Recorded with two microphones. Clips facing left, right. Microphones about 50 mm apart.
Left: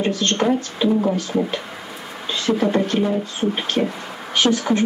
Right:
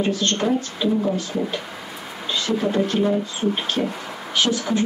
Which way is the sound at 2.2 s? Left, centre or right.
Left.